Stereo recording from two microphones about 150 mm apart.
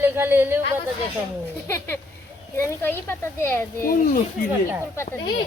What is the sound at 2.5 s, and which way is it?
A child's voice, 15° left (ahead or behind).